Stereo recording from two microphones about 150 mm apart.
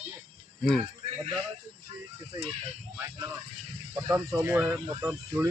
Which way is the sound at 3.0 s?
20° right (ahead or behind).